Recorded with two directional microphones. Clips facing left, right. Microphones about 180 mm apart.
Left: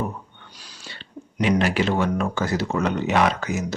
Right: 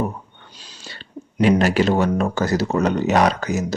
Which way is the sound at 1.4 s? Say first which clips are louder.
Right 4 dB; 40° right (ahead or behind).